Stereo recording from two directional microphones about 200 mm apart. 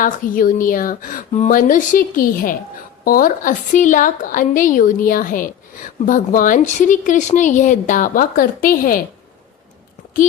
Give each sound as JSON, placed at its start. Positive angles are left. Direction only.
{"t": 0.0, "sound": "a woman's voice", "side_deg": 45}